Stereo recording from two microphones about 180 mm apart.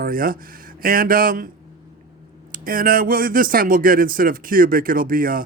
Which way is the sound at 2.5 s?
50° right (ahead or behind).